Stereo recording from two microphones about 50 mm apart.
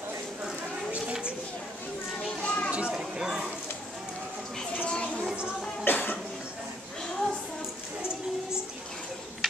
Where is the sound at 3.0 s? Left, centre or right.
Centre.